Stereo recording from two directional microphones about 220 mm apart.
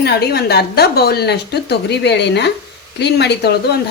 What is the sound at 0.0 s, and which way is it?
Speech, 45° left (ahead or behind).